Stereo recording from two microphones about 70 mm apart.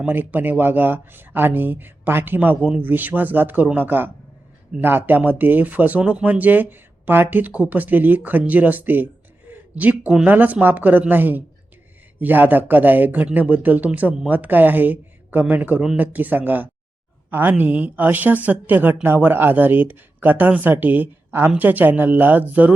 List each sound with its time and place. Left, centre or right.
0.1 s speech: right